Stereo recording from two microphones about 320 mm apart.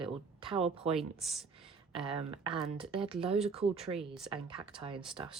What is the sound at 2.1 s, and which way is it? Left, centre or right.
Speech, centre.